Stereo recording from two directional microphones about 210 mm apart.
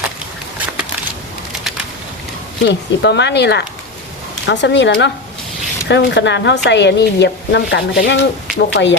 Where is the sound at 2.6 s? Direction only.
55° left (ahead or behind).